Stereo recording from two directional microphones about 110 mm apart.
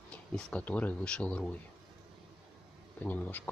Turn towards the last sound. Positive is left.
turn(degrees=15)  # may be behind; listen again after turning